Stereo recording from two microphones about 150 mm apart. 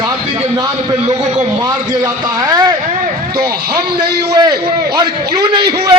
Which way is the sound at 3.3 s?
90° right.